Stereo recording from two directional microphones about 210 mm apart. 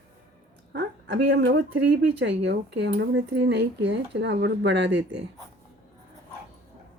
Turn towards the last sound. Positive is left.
turn(degrees=-55)  # may be behind; listen again after turning